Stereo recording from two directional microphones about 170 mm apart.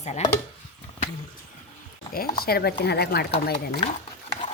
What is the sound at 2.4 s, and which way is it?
Speech, 65° left (ahead or behind).